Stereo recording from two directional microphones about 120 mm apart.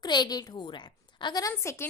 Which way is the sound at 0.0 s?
35° left (ahead or behind).